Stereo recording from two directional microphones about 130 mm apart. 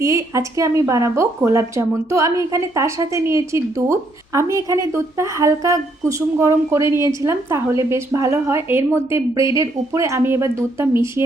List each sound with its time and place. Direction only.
0.0 s a woman's voice: 25° right (ahead or behind)